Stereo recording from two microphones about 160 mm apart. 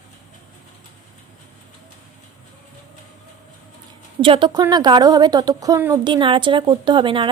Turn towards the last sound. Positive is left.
turn(degrees=-30)  # may be behind; listen again after turning